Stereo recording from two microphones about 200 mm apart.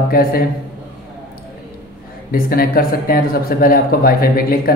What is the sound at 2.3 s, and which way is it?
Speech, 45° left (ahead or behind).